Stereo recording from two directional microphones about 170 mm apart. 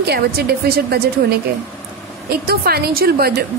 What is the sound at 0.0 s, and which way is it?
A woman's voice, 70° right (ahead or behind).